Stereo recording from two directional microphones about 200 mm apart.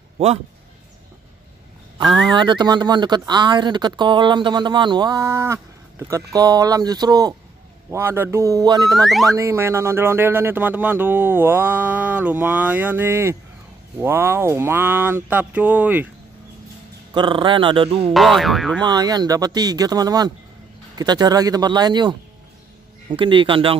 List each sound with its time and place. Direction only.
2.3 s speech: 25° right (ahead or behind)
8.9 s speech: centre (ahead or behind)
9.3 s speech: 15° right (ahead or behind)
17.1 s speech: 25° right (ahead or behind)
18.1 s speech: centre (ahead or behind)
18.8 s speech: 20° right (ahead or behind)